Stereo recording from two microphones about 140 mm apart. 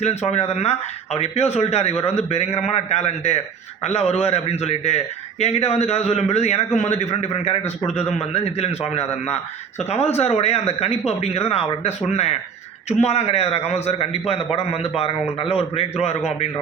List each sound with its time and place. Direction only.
0.0 s a man's voice: 50° left (ahead or behind)